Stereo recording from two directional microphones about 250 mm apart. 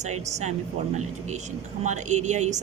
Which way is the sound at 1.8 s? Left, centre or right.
Right.